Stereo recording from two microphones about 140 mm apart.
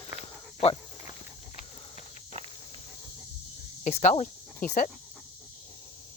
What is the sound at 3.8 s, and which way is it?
Speech, 50° left (ahead or behind).